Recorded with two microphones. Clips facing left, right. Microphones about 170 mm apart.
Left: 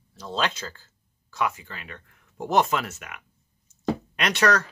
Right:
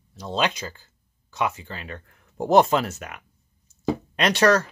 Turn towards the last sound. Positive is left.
turn(degrees=-30)  # may be behind; listen again after turning